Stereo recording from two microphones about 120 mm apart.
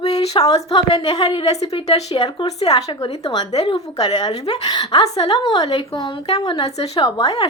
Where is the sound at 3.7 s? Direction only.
40° left (ahead or behind).